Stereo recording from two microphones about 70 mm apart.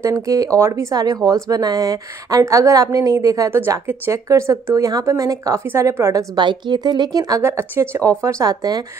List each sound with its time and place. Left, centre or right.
0.0 s speech: right
1.0 s a woman's voice: right
3.4 s speech: right
4.1 s speech: right
5.7 s speech: right
6.3 s speech: right
7.4 s speech: right
8.0 s speech: right